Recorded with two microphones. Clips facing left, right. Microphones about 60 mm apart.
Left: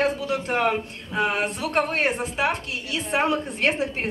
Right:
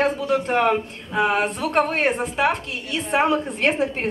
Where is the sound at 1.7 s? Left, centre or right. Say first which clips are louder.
Right 3 dB; centre.